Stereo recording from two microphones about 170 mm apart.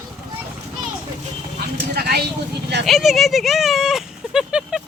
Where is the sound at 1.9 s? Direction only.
65° right (ahead or behind).